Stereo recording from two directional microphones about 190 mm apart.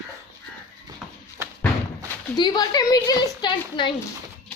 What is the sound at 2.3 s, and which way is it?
A woman's voice, 20° left (ahead or behind).